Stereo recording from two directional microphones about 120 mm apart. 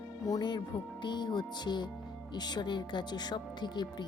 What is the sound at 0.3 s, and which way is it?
Speech, 35° left (ahead or behind).